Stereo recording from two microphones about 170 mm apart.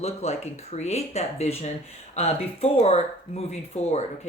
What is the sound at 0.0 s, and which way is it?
Speech, 40° left (ahead or behind).